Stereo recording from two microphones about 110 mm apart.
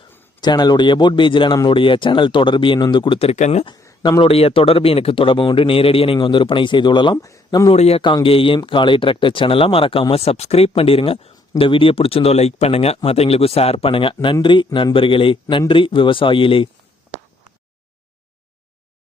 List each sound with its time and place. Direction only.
0.4 s speech: 40° left (ahead or behind)
3.2 s speech: 80° left
4.2 s speech: 65° left (ahead or behind)
6.1 s speech: 45° left (ahead or behind)
7.2 s speech: 30° left (ahead or behind)
7.7 s speech: 65° left (ahead or behind)
8.0 s speech: 50° left (ahead or behind)